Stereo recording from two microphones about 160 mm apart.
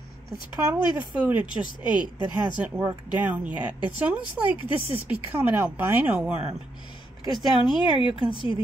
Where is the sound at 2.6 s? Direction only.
10° right (ahead or behind).